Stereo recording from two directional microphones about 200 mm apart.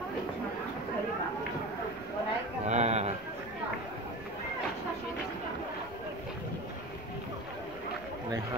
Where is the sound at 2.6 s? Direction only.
35° right (ahead or behind).